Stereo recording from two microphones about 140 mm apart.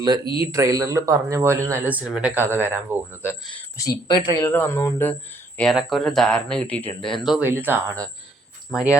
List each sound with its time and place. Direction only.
0.5 s speech: 20° right (ahead or behind)
3.8 s speech: 25° left (ahead or behind)
5.5 s speech: centre (ahead or behind)
7.4 s speech: 15° right (ahead or behind)